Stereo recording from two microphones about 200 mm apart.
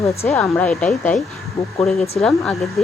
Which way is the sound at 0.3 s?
10° left (ahead or behind).